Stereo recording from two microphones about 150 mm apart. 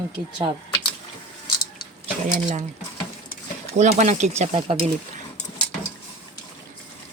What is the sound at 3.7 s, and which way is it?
Speech, 50° right (ahead or behind).